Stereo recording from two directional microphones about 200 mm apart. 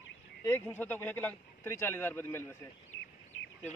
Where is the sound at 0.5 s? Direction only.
10° left (ahead or behind).